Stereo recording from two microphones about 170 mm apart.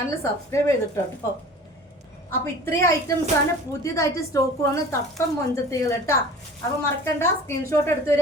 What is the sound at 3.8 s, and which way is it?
A woman's voice, 20° left (ahead or behind).